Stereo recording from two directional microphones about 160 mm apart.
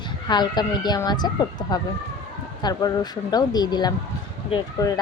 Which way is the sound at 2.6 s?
25° left (ahead or behind).